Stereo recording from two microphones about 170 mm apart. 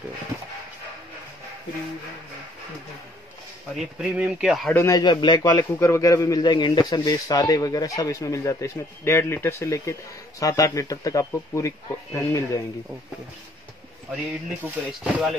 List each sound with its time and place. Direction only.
3.7 s a man's voice: 5° right (ahead or behind)
4.7 s a man's voice: 20° left (ahead or behind)
14.9 s a man's voice: centre (ahead or behind)